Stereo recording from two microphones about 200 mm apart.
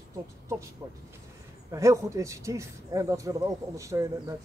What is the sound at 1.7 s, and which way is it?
A man's voice, 15° right (ahead or behind).